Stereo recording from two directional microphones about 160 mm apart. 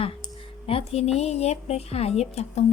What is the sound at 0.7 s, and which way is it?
Speech, 35° left (ahead or behind).